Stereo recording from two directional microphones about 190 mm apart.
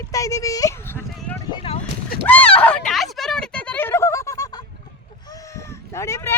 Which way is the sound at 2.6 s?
5° left (ahead or behind).